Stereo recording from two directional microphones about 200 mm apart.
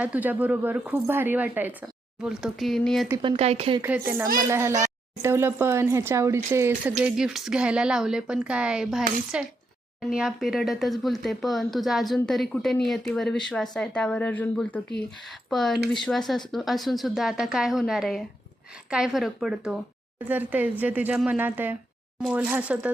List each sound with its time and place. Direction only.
0.0 s speech: 10° right (ahead or behind)
3.2 s speech: 30° right (ahead or behind)
3.8 s speech: 10° right (ahead or behind)